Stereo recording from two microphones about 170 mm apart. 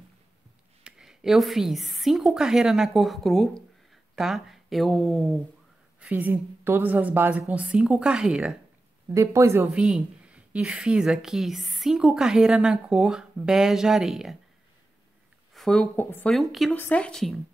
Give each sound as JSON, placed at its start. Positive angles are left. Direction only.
{"t": 0.8, "sound": "speech", "side_deg": -5}
{"t": 5.9, "sound": "a woman's voice", "side_deg": -10}
{"t": 9.1, "sound": "a woman's voice", "side_deg": -15}
{"t": 9.7, "sound": "a woman's voice", "side_deg": -5}
{"t": 15.5, "sound": "a woman's voice", "side_deg": 5}
{"t": 16.3, "sound": "a woman's voice", "side_deg": 0}